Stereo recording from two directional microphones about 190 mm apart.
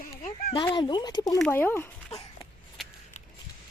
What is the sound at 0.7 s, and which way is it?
Speech, 25° left (ahead or behind).